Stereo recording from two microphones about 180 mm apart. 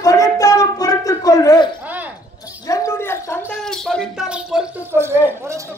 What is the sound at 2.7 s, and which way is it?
Gargling, 15° left (ahead or behind).